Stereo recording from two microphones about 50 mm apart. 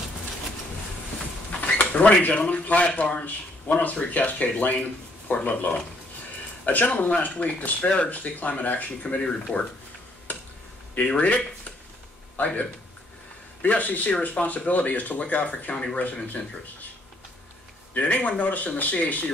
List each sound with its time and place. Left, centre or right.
1.6 s speech: left
11.0 s speech: left
14.4 s speech: centre
14.7 s speech: left
15.7 s speech: centre
16.0 s speech: left
17.9 s speech: left